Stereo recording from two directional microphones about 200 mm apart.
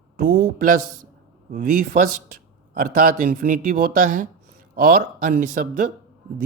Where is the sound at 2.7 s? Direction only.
45° right (ahead or behind).